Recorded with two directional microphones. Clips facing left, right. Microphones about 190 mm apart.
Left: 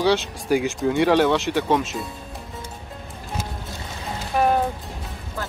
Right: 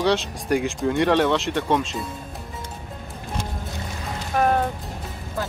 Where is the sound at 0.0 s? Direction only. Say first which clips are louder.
Left 1 dB; centre (ahead or behind).